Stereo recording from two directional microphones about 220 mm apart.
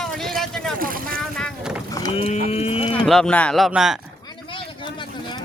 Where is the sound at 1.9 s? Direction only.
15° left (ahead or behind).